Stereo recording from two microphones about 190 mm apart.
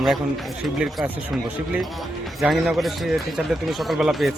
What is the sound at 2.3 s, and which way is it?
Speech, centre (ahead or behind).